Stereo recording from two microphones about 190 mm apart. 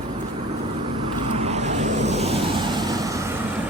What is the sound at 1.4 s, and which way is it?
Vehicle, 35° right (ahead or behind).